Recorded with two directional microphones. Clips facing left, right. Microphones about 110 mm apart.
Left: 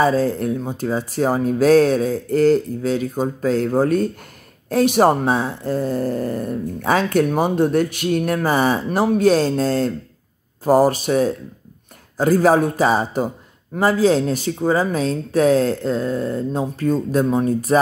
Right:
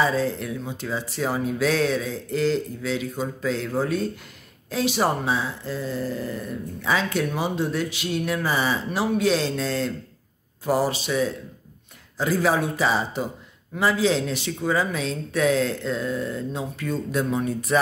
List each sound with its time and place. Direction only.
0.0 s speech: 45° left (ahead or behind)